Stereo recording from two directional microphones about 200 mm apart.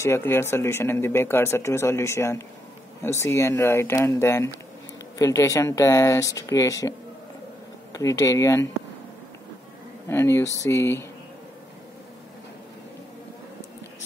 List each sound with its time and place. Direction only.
0.0 s speech: 10° left (ahead or behind)
7.9 s speech: 15° left (ahead or behind)
10.0 s speech: 10° left (ahead or behind)